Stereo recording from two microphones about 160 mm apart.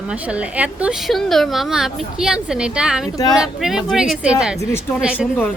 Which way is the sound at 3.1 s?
25° left (ahead or behind).